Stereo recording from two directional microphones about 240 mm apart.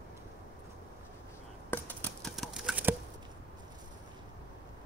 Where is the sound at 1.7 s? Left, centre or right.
Centre.